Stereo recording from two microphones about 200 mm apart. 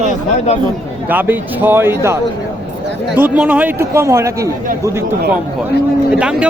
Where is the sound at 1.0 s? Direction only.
10° right (ahead or behind).